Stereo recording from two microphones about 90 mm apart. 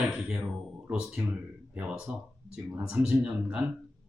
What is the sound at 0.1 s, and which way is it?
Speech, 15° right (ahead or behind).